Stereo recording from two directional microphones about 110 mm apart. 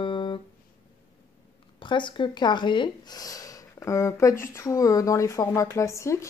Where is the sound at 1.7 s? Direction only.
45° left (ahead or behind).